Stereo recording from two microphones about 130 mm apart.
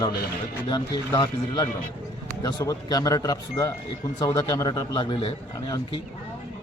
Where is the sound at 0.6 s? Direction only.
35° left (ahead or behind).